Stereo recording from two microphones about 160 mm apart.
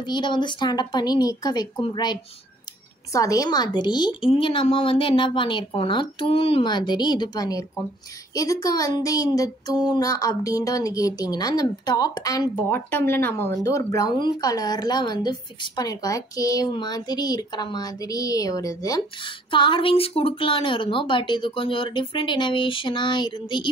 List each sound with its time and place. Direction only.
0.0 s a woman's voice: 30° left (ahead or behind)